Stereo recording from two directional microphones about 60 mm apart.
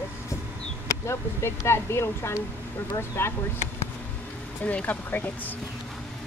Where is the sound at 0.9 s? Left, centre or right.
Left.